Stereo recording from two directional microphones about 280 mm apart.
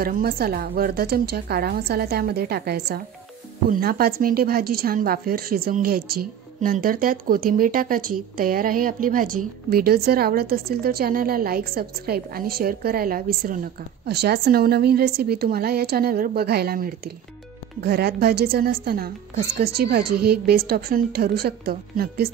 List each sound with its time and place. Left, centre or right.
0.0 s a woman's voice: right